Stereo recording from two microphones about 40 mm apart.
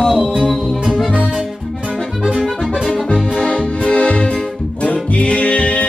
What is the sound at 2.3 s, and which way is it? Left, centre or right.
Accordion, right.